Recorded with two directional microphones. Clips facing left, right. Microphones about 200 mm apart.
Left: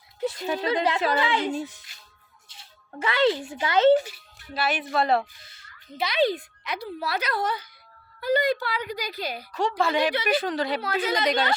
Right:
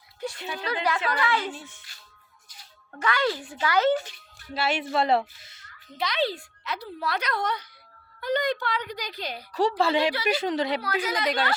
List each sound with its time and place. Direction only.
0.3 s speech: 40° left (ahead or behind)
0.6 s a woman's voice: 25° left (ahead or behind)
1.5 s speech: 40° left (ahead or behind)
2.5 s speech: 25° left (ahead or behind)
4.5 s a woman's voice: 25° right (ahead or behind)
6.0 s speech: 10° left (ahead or behind)
9.5 s a woman's voice: 35° right (ahead or behind)
10.0 s a woman's voice: 20° left (ahead or behind)
10.2 s a woman's voice: 25° right (ahead or behind)
10.8 s a woman's voice: 25° left (ahead or behind)